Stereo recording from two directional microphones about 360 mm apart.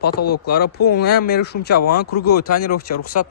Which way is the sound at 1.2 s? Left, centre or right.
Left.